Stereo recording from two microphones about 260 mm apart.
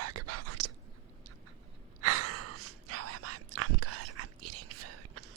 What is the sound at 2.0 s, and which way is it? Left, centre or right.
Whispering, right.